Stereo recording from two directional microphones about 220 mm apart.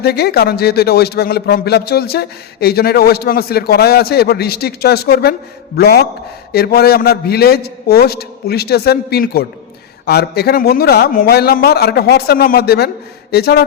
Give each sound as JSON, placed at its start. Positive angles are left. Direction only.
{"t": 0.0, "sound": "speech", "side_deg": 45}